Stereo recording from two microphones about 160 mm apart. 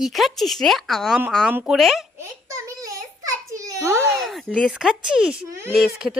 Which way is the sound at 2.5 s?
20° right (ahead or behind).